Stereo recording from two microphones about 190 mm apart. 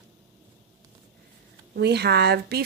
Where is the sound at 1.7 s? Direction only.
60° right (ahead or behind).